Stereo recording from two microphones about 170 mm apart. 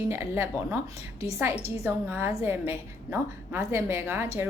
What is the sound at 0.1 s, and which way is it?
A woman's voice, 15° right (ahead or behind).